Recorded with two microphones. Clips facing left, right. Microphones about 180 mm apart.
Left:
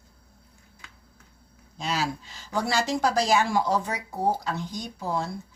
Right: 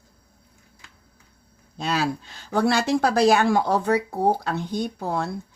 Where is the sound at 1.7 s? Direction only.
60° right (ahead or behind).